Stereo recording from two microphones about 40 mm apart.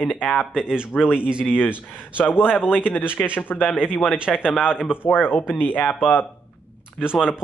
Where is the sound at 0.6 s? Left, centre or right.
Right.